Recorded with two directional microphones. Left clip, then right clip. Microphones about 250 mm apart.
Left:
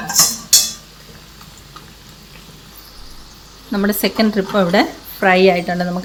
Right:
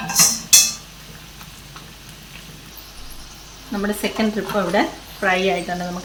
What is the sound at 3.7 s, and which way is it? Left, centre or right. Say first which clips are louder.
Speech: left 5 dB; left.